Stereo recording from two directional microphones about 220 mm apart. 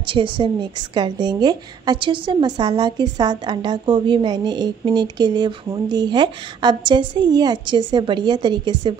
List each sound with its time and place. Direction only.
0.0 s a woman's voice: 25° right (ahead or behind)